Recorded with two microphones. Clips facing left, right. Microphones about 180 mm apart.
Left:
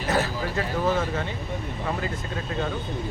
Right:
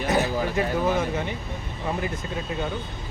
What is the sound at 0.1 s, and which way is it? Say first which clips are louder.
Speech: right 1 dB; 15° right (ahead or behind).